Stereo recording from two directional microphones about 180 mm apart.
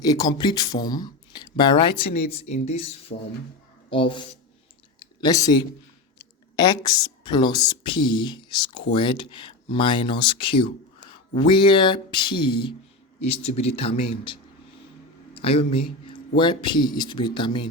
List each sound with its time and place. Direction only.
0.0 s speech: 20° left (ahead or behind)
15.3 s a sound: 30° left (ahead or behind)
16.0 s speech: 25° left (ahead or behind)